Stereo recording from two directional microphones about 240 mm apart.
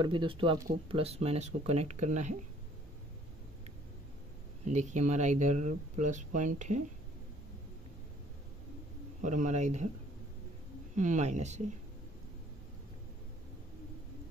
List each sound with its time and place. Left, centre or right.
0.0 s speech: centre
4.6 s speech: right
9.2 s speech: right
11.0 s speech: right